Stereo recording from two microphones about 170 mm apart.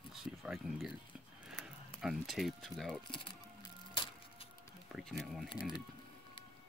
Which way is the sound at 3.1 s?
30° left (ahead or behind).